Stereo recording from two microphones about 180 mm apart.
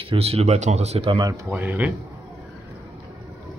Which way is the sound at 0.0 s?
35° right (ahead or behind).